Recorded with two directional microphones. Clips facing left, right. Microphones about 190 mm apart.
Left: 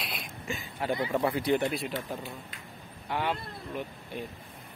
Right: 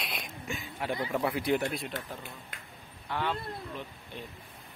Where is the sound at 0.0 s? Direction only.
Centre (ahead or behind).